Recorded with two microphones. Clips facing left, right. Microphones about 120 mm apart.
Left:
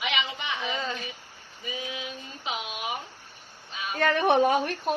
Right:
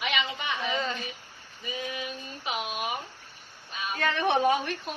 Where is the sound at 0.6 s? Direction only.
5° left (ahead or behind).